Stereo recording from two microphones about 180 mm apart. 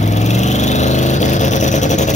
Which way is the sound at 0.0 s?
40° left (ahead or behind).